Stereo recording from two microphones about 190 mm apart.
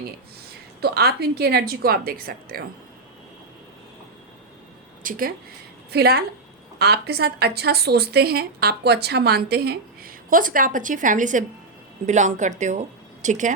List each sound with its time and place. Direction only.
0.8 s a woman's voice: 55° right (ahead or behind)
5.0 s a woman's voice: 50° right (ahead or behind)